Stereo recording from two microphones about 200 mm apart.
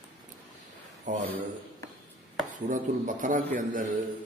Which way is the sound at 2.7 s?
40° right (ahead or behind).